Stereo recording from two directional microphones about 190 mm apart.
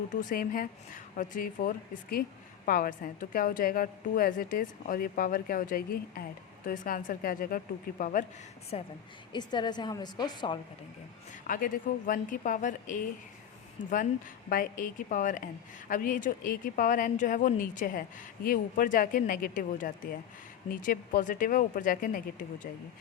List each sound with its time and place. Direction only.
0.1 s a woman's voice: 45° left (ahead or behind)
8.7 s a woman's voice: 30° left (ahead or behind)
11.4 s a woman's voice: 45° left (ahead or behind)
14.5 s a woman's voice: 45° left (ahead or behind)